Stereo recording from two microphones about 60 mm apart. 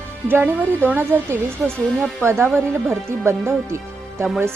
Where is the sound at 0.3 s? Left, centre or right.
Right.